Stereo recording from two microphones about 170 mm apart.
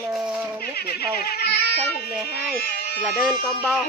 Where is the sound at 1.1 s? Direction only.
65° left (ahead or behind).